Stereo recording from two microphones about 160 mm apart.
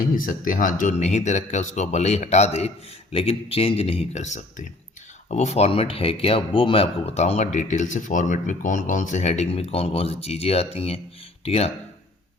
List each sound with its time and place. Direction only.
0.1 s speech: 60° left (ahead or behind); by 11.7 s 40° left (ahead or behind)